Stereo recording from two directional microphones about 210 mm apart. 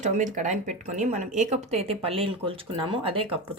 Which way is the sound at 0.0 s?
35° right (ahead or behind).